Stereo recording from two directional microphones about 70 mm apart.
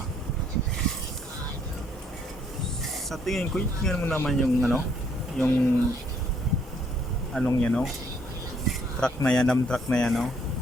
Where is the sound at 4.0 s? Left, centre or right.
Left.